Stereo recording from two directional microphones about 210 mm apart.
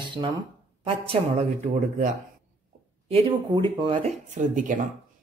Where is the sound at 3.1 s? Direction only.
25° right (ahead or behind).